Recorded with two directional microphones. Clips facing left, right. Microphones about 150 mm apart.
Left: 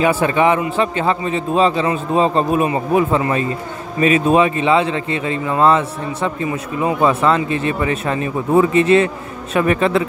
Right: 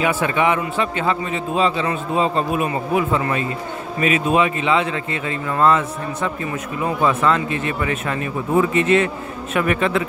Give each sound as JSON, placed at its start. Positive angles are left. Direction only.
{"t": 0.0, "sound": "a man's voice", "side_deg": 35}